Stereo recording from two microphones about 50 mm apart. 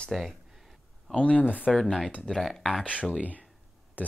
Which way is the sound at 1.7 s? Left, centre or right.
Centre.